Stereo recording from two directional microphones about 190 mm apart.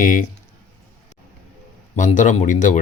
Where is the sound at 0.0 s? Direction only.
45° left (ahead or behind).